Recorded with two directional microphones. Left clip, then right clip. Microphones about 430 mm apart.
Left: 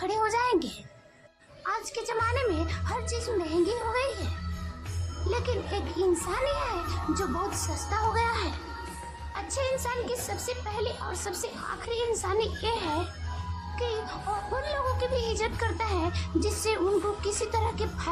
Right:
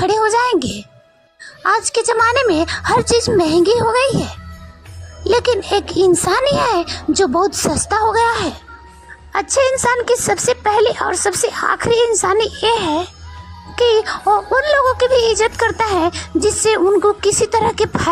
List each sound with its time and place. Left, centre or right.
0.0 s a sound: centre
1.6 s speech: centre
5.3 s speech: centre